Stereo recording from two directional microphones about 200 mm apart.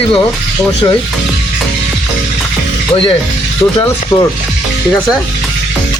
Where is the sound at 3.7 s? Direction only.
15° left (ahead or behind).